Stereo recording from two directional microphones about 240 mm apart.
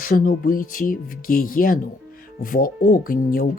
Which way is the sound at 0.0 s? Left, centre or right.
Left.